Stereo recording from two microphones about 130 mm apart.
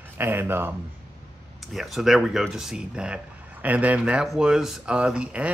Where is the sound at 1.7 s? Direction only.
Centre (ahead or behind).